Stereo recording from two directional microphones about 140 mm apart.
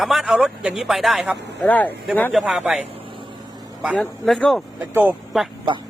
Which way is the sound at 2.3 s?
Centre (ahead or behind).